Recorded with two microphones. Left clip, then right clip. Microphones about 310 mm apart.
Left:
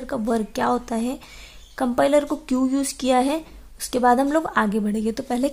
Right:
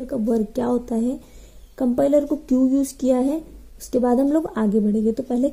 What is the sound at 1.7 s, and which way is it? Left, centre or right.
A woman's voice, centre.